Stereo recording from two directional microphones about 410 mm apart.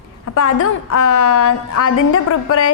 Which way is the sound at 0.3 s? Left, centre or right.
Left.